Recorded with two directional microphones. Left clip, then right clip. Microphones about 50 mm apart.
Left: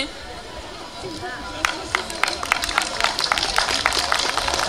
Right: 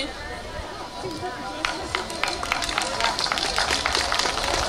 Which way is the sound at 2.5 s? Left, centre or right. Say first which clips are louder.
Left 3 dB; left.